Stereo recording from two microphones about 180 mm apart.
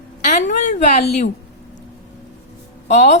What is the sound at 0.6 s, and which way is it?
Speech, 45° left (ahead or behind).